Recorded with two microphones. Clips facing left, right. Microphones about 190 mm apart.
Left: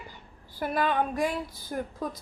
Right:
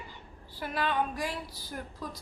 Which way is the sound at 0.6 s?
50° left (ahead or behind).